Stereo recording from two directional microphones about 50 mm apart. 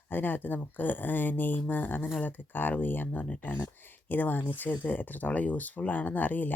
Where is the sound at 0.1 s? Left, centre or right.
Left.